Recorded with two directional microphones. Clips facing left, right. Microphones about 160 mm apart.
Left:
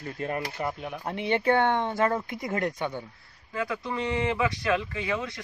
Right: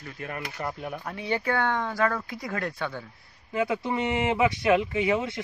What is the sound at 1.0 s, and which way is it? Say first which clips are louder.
Speech: left 4 dB; 25° left (ahead or behind).